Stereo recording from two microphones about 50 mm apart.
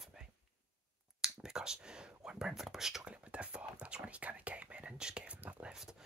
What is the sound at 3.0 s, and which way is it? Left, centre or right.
Speech, right.